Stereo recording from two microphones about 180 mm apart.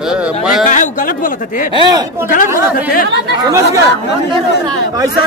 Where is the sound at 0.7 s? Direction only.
45° left (ahead or behind).